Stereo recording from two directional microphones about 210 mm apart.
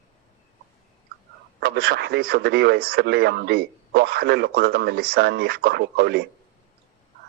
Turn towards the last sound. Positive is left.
turn(degrees=-50)  # may be behind; listen again after turning